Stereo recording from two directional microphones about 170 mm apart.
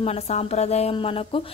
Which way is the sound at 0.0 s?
40° left (ahead or behind).